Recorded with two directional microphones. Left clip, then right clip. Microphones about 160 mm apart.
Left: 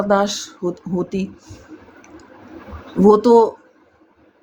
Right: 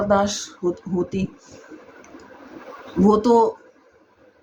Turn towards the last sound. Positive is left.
turn(degrees=45)  # may be behind; listen again after turning